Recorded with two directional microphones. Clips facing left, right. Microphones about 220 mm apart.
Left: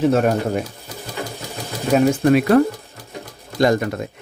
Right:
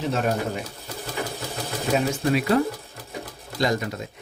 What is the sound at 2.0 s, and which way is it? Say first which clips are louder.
Speech: left 7 dB; 55° left (ahead or behind).